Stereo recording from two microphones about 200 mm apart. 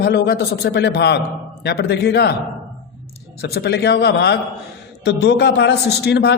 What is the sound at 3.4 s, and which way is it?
A man's voice, 50° left (ahead or behind).